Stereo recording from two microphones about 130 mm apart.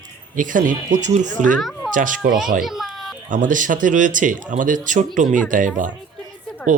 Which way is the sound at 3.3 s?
85° right.